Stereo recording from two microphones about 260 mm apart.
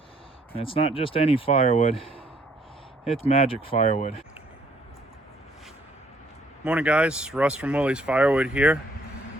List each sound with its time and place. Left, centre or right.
0.5 s speech: left
6.7 s speech: centre